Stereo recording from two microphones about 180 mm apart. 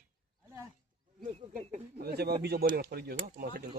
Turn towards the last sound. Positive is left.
turn(degrees=-55)  # may be behind; listen again after turning